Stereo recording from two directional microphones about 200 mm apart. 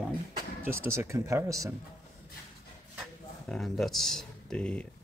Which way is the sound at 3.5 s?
Centre (ahead or behind).